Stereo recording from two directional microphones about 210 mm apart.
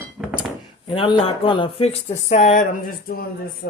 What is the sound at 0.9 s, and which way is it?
Speech, 25° left (ahead or behind).